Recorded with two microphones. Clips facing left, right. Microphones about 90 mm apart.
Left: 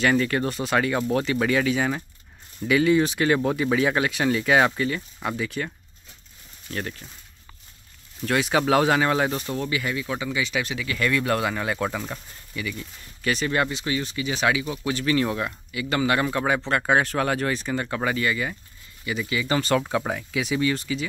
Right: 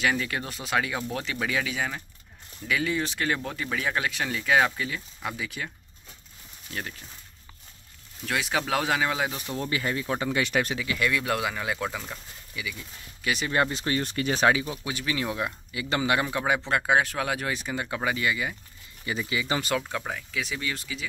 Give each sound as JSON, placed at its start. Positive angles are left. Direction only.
{"t": 0.0, "sound": "speech", "side_deg": -5}
{"t": 6.7, "sound": "speech", "side_deg": 0}
{"t": 8.3, "sound": "speech", "side_deg": 0}
{"t": 9.6, "sound": "speech", "side_deg": -35}
{"t": 10.3, "sound": "speech", "side_deg": -50}
{"t": 11.0, "sound": "speech", "side_deg": -10}
{"t": 13.6, "sound": "speech", "side_deg": -40}
{"t": 14.9, "sound": "speech", "side_deg": -10}
{"t": 15.7, "sound": "speech", "side_deg": -25}
{"t": 19.0, "sound": "speech", "side_deg": -25}
{"t": 19.9, "sound": "speech", "side_deg": 15}